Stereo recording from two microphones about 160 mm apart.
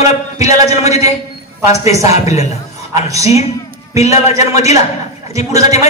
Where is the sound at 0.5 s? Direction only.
45° left (ahead or behind).